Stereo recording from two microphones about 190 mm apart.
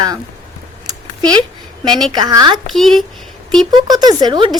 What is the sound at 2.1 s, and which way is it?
Speech, 20° right (ahead or behind).